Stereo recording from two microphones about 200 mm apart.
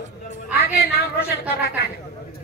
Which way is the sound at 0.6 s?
50° left (ahead or behind).